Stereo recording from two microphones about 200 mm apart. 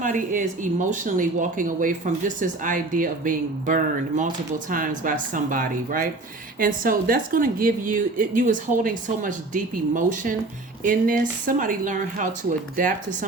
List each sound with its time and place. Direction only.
0.0 s a woman's voice: 40° right (ahead or behind)